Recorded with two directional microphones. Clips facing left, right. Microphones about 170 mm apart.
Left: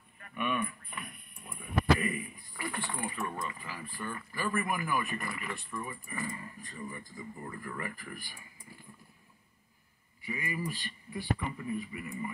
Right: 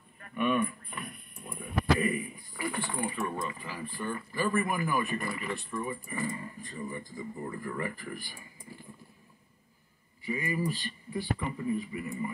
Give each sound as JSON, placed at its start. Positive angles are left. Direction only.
{"t": 0.3, "sound": "a sound", "side_deg": -35}
{"t": 2.0, "sound": "speech", "side_deg": -20}
{"t": 10.2, "sound": "speech", "side_deg": -30}